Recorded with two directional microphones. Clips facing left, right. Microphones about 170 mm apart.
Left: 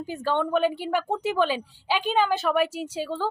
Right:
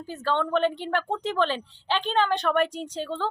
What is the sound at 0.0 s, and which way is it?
A woman's voice, 15° left (ahead or behind).